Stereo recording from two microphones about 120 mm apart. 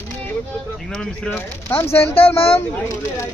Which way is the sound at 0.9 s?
5° left (ahead or behind).